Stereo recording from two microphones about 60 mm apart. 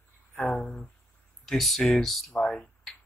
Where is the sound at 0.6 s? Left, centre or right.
Centre.